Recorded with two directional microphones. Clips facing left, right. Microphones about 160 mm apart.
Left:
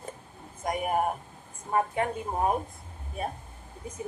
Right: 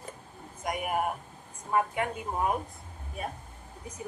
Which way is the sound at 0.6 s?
30° left (ahead or behind).